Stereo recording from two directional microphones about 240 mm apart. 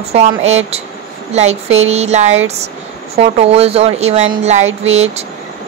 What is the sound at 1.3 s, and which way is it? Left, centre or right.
Speech, right.